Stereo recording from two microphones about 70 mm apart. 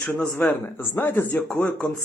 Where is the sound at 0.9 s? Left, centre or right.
Left.